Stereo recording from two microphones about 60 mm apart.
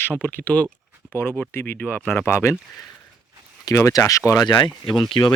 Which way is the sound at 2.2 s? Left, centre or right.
Left.